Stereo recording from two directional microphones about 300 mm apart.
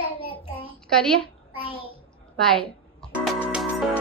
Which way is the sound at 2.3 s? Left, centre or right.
Centre.